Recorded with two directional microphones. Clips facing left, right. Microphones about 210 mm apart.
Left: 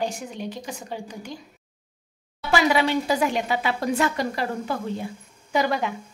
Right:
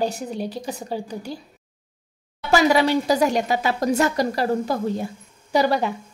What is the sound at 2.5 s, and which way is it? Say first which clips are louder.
A woman's voice: right 3 dB; 40° right (ahead or behind).